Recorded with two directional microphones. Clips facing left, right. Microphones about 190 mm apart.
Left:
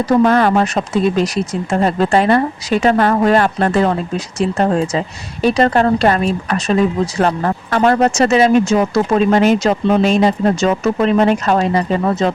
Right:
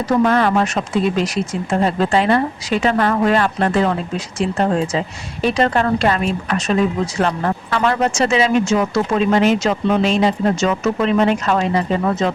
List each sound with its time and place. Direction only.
0.0 s speech: 40° left (ahead or behind)